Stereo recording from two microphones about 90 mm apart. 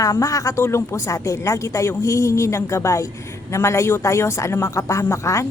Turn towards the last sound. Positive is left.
turn(degrees=35)  # may be behind; listen again after turning